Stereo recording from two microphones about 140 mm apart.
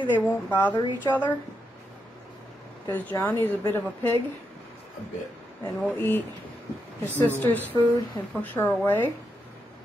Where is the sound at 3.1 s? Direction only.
10° left (ahead or behind).